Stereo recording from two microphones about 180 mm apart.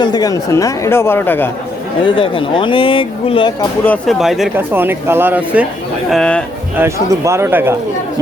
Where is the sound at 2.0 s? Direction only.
30° left (ahead or behind).